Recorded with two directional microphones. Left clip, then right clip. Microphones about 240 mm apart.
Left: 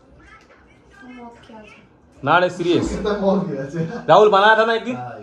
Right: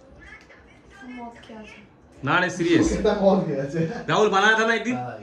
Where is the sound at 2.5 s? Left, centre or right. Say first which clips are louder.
Left 1 dB; right.